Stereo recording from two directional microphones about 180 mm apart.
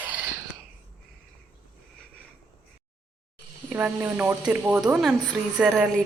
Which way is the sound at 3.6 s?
10° right (ahead or behind).